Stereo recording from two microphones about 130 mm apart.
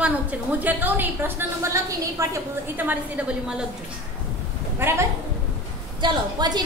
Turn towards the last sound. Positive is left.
turn(degrees=-30)  # may be behind; listen again after turning